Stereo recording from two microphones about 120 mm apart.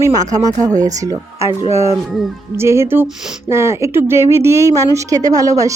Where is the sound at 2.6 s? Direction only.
20° right (ahead or behind).